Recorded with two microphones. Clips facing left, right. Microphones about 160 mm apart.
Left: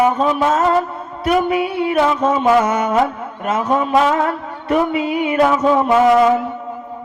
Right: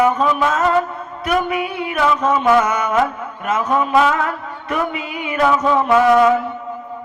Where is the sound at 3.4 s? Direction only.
30° left (ahead or behind).